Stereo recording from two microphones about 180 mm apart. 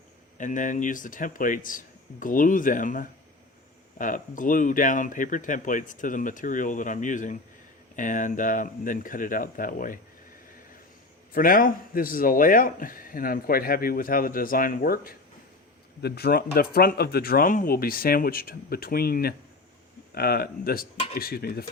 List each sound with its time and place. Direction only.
0.3 s speech: 45° left (ahead or behind)
11.3 s speech: 50° left (ahead or behind)